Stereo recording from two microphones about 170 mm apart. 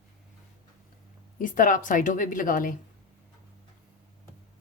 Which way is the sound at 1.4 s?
50° left (ahead or behind).